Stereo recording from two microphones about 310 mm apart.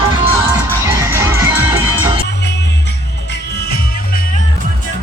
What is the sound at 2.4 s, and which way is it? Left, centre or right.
Music, left.